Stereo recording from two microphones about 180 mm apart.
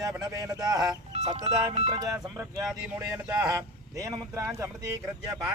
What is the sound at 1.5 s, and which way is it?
Speech, 40° right (ahead or behind).